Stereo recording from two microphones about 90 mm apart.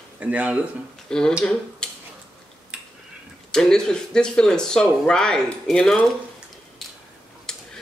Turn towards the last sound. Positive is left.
turn(degrees=5)  # may be behind; listen again after turning